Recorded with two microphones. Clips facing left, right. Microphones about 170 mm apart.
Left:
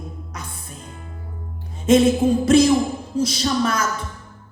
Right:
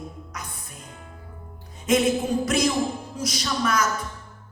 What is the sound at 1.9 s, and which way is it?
Speech, 30° left (ahead or behind).